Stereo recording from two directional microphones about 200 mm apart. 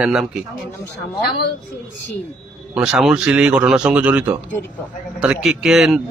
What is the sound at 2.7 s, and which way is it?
A man's voice, 5° right (ahead or behind).